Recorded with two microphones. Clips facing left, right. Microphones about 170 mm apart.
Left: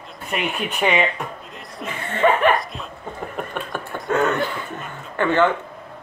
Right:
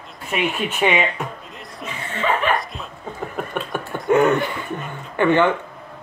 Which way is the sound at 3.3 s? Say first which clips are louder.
Right 3 dB; centre (ahead or behind).